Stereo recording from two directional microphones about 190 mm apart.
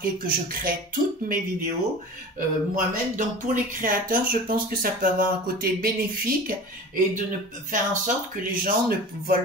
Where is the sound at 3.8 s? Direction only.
45° right (ahead or behind).